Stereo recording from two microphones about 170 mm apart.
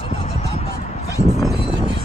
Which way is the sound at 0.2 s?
40° left (ahead or behind).